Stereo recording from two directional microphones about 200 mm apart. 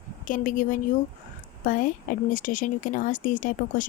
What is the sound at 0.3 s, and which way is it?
A woman's voice, 40° left (ahead or behind).